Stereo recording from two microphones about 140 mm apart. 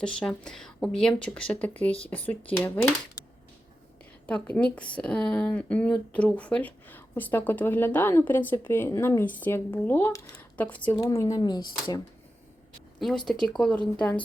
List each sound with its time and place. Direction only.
0.0 s a woman's voice: 5° left (ahead or behind)
4.3 s a woman's voice: 10° left (ahead or behind)
10.3 s a sound: 10° left (ahead or behind)
10.9 s speech: 25° left (ahead or behind)
13.0 s speech: centre (ahead or behind)